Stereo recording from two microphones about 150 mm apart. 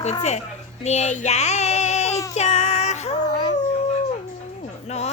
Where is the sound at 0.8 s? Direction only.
50° left (ahead or behind).